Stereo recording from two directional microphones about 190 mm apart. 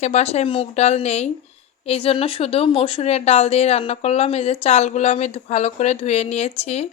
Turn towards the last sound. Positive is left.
turn(degrees=35)  # may be behind; listen again after turning